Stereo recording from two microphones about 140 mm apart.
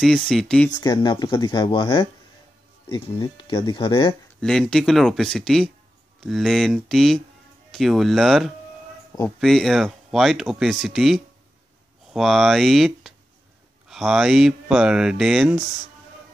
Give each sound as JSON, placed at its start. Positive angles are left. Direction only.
{"t": 0.0, "sound": "speech", "side_deg": 0}
{"t": 0.7, "sound": "speech", "side_deg": 35}
{"t": 4.4, "sound": "speech", "side_deg": 5}